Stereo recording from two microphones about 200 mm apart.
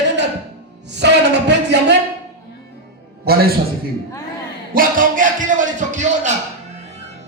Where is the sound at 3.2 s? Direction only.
50° right (ahead or behind).